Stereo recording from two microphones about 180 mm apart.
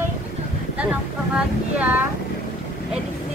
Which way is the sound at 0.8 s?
5° right (ahead or behind).